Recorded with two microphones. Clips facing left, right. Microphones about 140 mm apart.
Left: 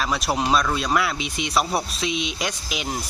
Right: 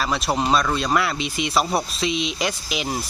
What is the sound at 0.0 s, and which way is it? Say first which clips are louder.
Speech: right 1 dB; centre (ahead or behind).